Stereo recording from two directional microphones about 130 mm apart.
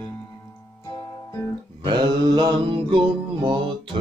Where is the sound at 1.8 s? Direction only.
35° right (ahead or behind).